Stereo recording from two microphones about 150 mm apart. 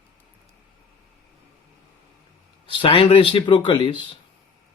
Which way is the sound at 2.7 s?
35° left (ahead or behind).